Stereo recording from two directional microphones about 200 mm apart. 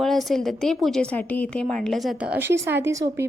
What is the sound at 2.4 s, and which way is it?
Speech, 10° right (ahead or behind).